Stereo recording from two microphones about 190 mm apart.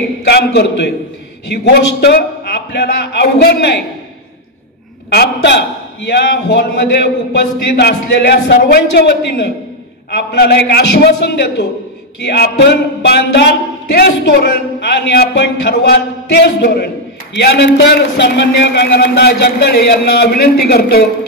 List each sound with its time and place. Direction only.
0.2 s a man's voice: 60° left (ahead or behind)
5.1 s speech: 60° left (ahead or behind)
12.2 s speech: 65° left (ahead or behind)